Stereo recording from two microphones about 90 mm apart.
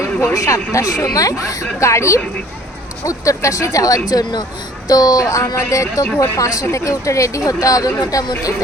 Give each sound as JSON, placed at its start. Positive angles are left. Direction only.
{"t": 0.3, "sound": "speech", "side_deg": 35}